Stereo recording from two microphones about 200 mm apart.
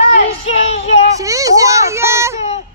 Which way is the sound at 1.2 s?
15° right (ahead or behind).